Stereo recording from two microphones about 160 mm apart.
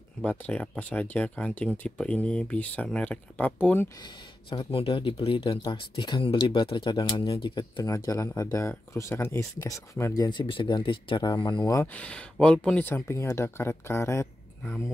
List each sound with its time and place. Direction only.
0.2 s speech: 10° left (ahead or behind)
4.0 s speech: 30° left (ahead or behind)
11.8 s speech: 10° left (ahead or behind)